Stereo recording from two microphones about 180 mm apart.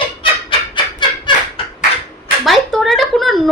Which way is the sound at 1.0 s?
25° left (ahead or behind).